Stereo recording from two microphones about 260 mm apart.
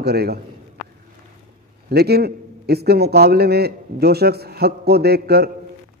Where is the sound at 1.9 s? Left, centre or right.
Right.